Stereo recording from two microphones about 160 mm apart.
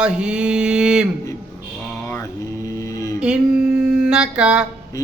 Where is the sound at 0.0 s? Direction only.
5° right (ahead or behind).